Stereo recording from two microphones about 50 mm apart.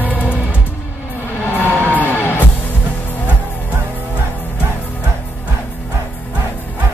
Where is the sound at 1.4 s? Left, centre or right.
Left.